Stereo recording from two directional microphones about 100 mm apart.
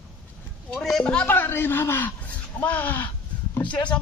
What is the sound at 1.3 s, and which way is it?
Speech, 20° left (ahead or behind).